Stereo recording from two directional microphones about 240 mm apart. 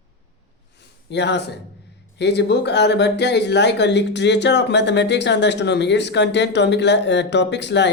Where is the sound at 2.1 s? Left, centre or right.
Left.